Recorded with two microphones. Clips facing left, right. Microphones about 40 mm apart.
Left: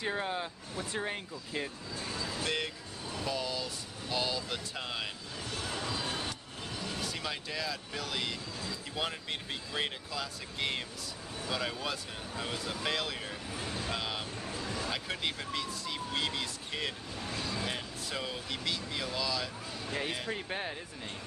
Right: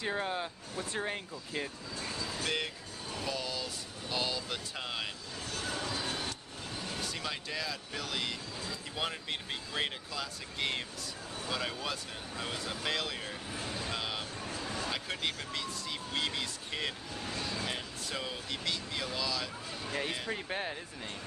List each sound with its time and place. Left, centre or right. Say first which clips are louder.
0.0 s speech: even; centre
2.0 s speech: left 1 dB; left
2.4 s speech: even; centre
7.0 s speech: even; centre
13.8 s vehicle: left 1 dB; centre
14.9 s speech: even; centre